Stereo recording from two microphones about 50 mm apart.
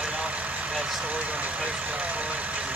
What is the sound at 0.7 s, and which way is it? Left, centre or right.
Speech, right.